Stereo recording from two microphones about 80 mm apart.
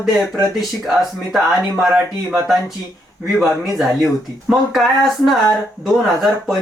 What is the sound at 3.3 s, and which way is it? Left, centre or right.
Speech, centre.